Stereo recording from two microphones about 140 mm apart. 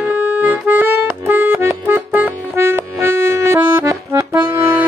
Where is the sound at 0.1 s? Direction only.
15° right (ahead or behind).